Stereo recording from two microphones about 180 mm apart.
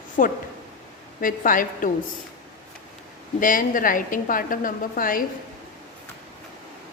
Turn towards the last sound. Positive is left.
turn(degrees=50)  # may be behind; listen again after turning